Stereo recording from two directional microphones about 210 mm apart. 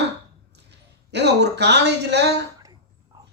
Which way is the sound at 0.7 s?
55° right (ahead or behind).